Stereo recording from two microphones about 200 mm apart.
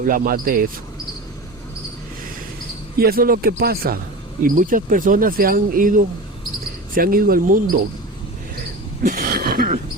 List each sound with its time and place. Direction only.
0.1 s speech: 45° right (ahead or behind)
3.0 s speech: 50° right (ahead or behind)
9.0 s a sound: 45° right (ahead or behind)